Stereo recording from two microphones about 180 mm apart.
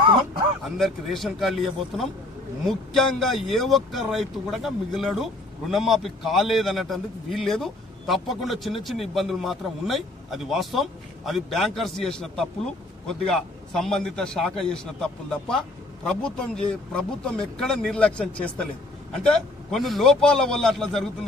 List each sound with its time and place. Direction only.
0.0 s a sound: 30° right (ahead or behind)
0.7 s speech: centre (ahead or behind)
19.7 s speech: centre (ahead or behind)